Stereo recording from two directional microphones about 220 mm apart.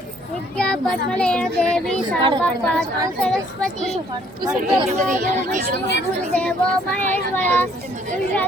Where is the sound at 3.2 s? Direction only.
Centre (ahead or behind).